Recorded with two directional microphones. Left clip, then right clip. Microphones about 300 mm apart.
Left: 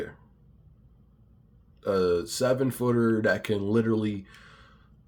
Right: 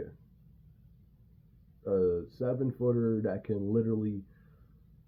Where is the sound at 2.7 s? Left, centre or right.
Left.